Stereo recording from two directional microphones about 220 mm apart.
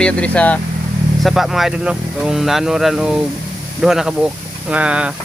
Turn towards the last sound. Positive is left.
turn(degrees=-5)  # may be behind; listen again after turning